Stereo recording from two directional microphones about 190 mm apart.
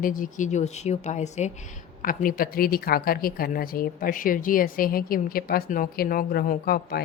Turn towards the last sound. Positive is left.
turn(degrees=55)  # may be behind; listen again after turning